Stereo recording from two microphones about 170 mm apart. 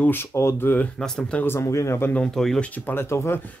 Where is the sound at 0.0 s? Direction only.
15° left (ahead or behind).